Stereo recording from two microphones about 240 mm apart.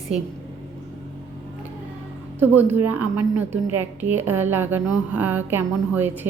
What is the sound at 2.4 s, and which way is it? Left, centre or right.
A woman's voice, centre.